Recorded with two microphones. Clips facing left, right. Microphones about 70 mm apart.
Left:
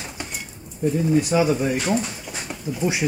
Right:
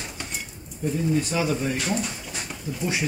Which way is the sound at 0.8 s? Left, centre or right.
Left.